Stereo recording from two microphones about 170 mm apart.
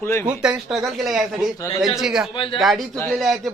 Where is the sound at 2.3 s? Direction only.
30° left (ahead or behind).